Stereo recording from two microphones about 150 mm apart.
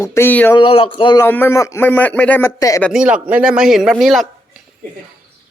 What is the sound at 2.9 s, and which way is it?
A man's voice, 5° right (ahead or behind).